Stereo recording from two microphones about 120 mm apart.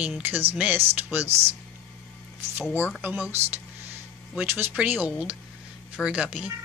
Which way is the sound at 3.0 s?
15° right (ahead or behind).